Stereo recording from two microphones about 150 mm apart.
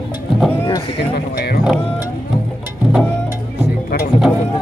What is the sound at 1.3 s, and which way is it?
Music, 90° left.